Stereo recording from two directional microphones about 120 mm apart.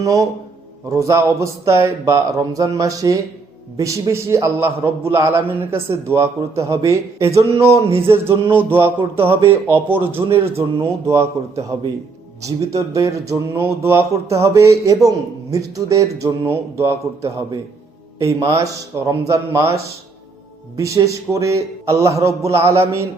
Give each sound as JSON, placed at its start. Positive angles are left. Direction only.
{"t": 0.0, "sound": "a man's voice", "side_deg": -25}
{"t": 9.0, "sound": "a man's voice", "side_deg": -50}
{"t": 9.9, "sound": "speech", "side_deg": -15}
{"t": 10.4, "sound": "speech", "side_deg": -55}
{"t": 10.8, "sound": "a man's voice", "side_deg": -25}
{"t": 12.4, "sound": "a man's voice", "side_deg": -30}